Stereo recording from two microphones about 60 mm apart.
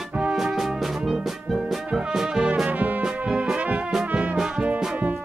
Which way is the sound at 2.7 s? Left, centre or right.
Right.